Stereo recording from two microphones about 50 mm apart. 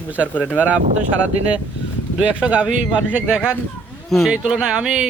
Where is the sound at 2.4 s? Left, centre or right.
Right.